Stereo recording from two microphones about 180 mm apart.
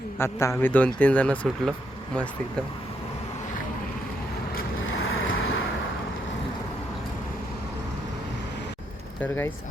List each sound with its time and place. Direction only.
0.2 s speech: 15° left (ahead or behind)
4.9 s vehicle: 90° left
9.2 s speech: 10° left (ahead or behind)